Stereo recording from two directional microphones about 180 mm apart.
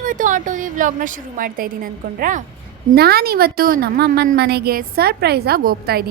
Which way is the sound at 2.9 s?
60° right (ahead or behind).